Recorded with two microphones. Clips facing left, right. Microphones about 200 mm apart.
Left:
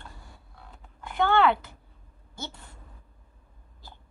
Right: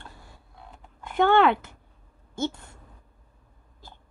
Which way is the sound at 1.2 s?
50° right (ahead or behind).